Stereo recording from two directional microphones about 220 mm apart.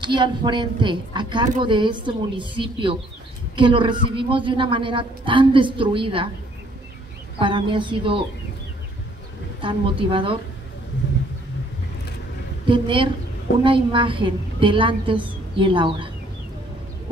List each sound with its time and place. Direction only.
0.0 s a woman's voice: 20° right (ahead or behind)
7.3 s a woman's voice: 20° right (ahead or behind)
9.6 s a woman's voice: 25° right (ahead or behind)
12.6 s a woman's voice: 25° right (ahead or behind)